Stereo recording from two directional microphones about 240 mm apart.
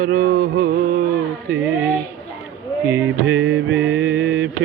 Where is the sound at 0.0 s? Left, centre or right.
Right.